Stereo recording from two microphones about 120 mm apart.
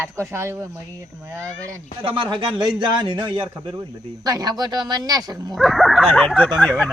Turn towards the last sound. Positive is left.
turn(degrees=5)  # may be behind; listen again after turning